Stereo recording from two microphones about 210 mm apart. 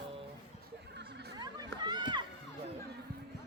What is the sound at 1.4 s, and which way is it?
Run, 20° right (ahead or behind).